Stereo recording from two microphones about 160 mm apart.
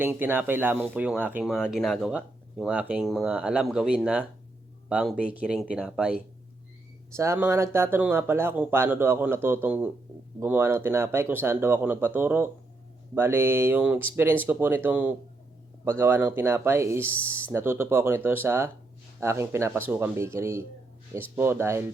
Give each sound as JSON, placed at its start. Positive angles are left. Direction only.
{"t": 0.0, "sound": "speech", "side_deg": -15}
{"t": 7.1, "sound": "speech", "side_deg": -15}